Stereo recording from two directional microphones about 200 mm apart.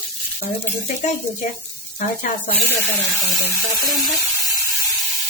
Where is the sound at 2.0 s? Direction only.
40° left (ahead or behind).